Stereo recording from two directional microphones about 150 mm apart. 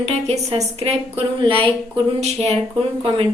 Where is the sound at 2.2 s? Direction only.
45° right (ahead or behind).